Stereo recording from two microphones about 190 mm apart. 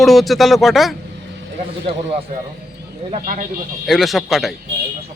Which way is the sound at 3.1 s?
45° right (ahead or behind).